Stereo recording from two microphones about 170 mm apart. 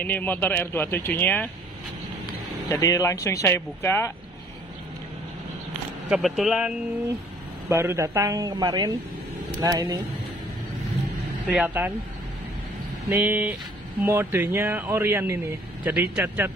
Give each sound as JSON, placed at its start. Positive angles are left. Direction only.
{"t": 0.0, "sound": "speech", "side_deg": 10}
{"t": 2.7, "sound": "speech", "side_deg": 20}
{"t": 6.0, "sound": "speech", "side_deg": -5}
{"t": 7.7, "sound": "speech", "side_deg": -15}
{"t": 11.4, "sound": "speech", "side_deg": -10}
{"t": 13.1, "sound": "speech", "side_deg": -10}